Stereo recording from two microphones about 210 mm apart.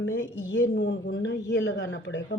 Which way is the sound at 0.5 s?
60° left (ahead or behind).